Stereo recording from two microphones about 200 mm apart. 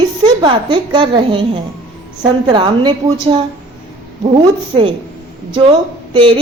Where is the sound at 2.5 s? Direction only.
25° right (ahead or behind).